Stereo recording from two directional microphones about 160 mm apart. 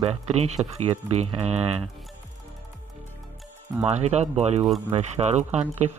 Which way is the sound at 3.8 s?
45° right (ahead or behind).